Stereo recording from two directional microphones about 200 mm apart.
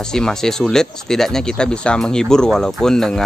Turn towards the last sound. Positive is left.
turn(degrees=5)  # may be behind; listen again after turning